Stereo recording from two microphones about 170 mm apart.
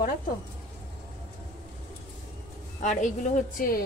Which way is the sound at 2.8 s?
45° left (ahead or behind).